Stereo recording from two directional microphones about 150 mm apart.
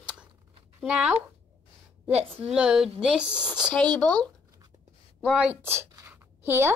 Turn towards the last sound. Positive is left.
turn(degrees=-15)  # may be behind; listen again after turning